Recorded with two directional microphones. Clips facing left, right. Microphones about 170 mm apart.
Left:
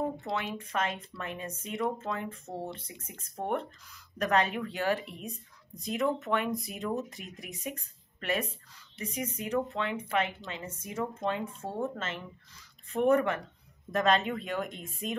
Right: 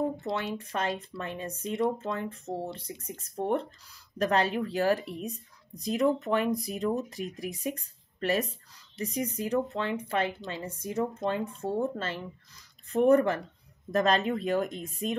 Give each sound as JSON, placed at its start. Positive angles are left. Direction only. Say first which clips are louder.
{"t": 0.2, "sound": "speech", "louder": "right 2 dB", "side_deg": -35}